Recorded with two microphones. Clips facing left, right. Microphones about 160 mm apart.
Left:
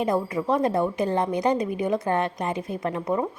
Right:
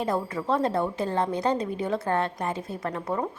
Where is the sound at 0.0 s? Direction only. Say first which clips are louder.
Left 3 dB; 15° left (ahead or behind).